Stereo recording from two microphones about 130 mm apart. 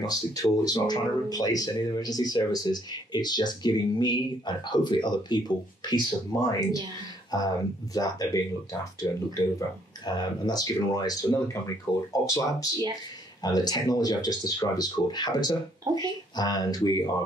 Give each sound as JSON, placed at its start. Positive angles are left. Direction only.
{"t": 0.0, "sound": "speech", "side_deg": 30}
{"t": 15.8, "sound": "speech", "side_deg": -30}
{"t": 16.3, "sound": "speech", "side_deg": 30}